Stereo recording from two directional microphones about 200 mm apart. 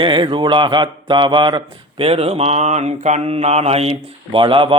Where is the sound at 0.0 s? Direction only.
25° right (ahead or behind).